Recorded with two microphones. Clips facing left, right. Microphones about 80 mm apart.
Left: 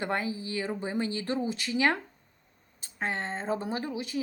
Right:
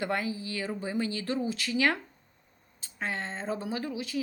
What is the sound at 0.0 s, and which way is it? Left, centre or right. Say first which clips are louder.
Speech: even; left.